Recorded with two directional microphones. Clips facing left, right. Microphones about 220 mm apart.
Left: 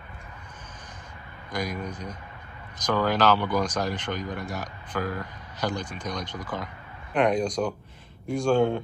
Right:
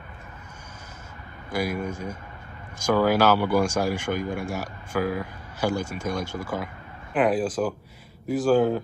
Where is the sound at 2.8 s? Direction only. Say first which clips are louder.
Right 3 dB; 10° right (ahead or behind).